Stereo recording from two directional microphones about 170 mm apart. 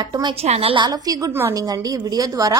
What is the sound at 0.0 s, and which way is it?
A woman's voice, 25° right (ahead or behind).